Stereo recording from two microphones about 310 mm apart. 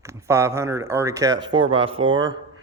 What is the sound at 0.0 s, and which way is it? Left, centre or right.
Speech, centre.